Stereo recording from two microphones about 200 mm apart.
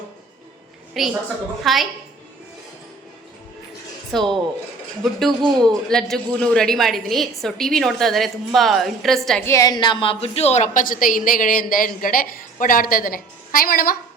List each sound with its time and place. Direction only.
0.9 s a woman's voice: centre (ahead or behind)
4.1 s a woman's voice: centre (ahead or behind)
9.5 s a woman's voice: 15° left (ahead or behind); by 13.9 s 45° left (ahead or behind)